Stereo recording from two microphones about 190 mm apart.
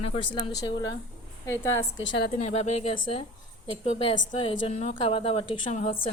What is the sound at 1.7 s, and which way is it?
Speech, 75° left (ahead or behind).